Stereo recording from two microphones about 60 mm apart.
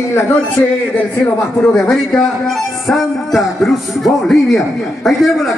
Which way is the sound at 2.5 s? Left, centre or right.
Centre.